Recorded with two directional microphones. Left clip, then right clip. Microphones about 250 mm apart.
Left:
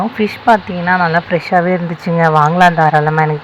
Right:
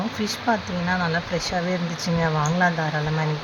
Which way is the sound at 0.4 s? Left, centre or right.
Left.